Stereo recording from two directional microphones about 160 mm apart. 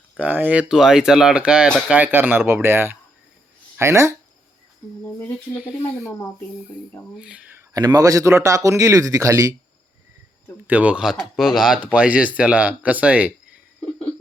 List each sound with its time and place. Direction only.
0.2 s speech: 10° right (ahead or behind)
5.6 s speech: centre (ahead or behind)
7.2 s speech: 5° right (ahead or behind)
7.7 s speech: 20° right (ahead or behind)
10.7 s speech: 10° right (ahead or behind)